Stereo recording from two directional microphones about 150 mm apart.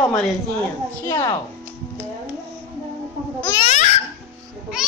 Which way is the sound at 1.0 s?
25° left (ahead or behind).